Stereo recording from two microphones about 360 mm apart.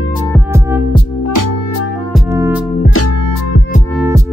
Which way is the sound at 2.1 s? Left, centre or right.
Centre.